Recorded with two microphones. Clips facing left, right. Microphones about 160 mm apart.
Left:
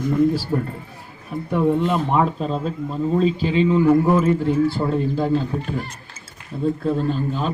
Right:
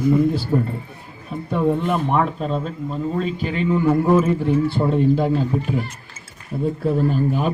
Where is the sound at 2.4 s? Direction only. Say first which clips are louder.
Even; centre (ahead or behind).